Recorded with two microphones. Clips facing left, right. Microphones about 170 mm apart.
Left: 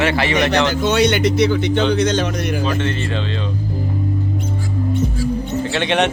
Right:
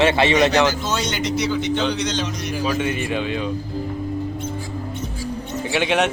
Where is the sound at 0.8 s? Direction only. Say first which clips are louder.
Left 8 dB; 65° left (ahead or behind).